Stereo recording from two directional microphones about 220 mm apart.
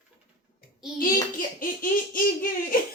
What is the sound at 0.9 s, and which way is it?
Speech, 40° left (ahead or behind).